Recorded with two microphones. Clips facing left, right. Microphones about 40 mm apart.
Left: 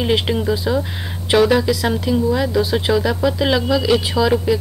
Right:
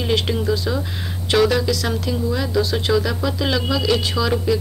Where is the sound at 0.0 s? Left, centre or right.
Centre.